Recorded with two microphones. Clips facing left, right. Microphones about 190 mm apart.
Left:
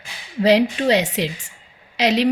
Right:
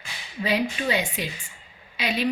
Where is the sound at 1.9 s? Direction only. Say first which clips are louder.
Left 9 dB; 85° left.